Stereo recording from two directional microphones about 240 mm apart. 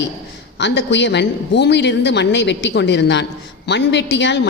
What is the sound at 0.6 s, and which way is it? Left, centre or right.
A woman's voice, left.